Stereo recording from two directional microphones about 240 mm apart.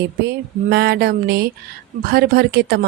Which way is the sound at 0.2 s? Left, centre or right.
Right.